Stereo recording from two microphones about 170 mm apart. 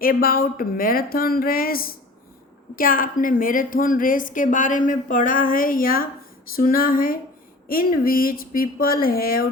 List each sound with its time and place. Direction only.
0.0 s a woman's voice: 60° left (ahead or behind)